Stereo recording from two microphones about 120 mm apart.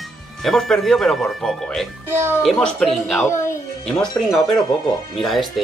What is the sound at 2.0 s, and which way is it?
Speech, 20° right (ahead or behind).